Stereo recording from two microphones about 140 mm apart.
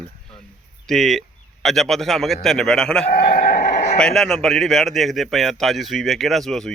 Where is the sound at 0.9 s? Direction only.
Centre (ahead or behind).